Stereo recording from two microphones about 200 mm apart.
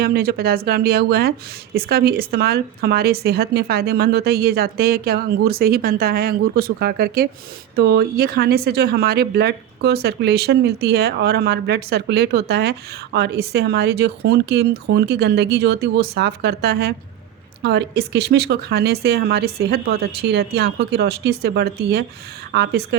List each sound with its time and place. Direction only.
0.0 s speech: 50° right (ahead or behind)